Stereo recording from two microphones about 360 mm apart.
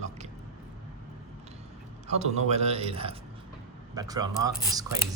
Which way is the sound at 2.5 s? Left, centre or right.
Centre.